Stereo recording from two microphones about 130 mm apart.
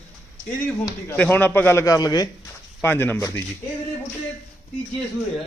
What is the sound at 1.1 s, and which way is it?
A man's voice, 10° left (ahead or behind).